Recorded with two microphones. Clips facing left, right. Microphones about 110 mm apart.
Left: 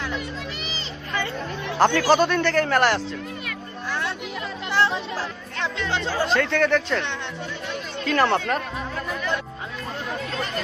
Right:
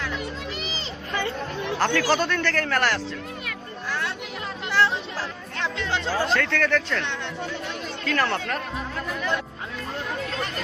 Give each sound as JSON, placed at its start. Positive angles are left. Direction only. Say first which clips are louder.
{"t": 1.8, "sound": "a man's voice", "louder": "left 5 dB", "side_deg": 20}
{"t": 4.7, "sound": "chatter", "louder": "left 1 dB", "side_deg": 25}
{"t": 5.6, "sound": "speech", "louder": "left 1 dB", "side_deg": -5}
{"t": 6.2, "sound": "a man's voice", "louder": "left 3 dB", "side_deg": 20}